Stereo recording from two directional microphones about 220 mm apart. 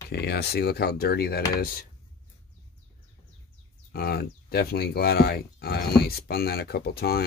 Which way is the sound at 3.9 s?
45° left (ahead or behind).